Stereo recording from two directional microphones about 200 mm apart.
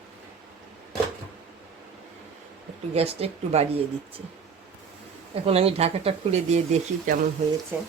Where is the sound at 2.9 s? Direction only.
30° right (ahead or behind).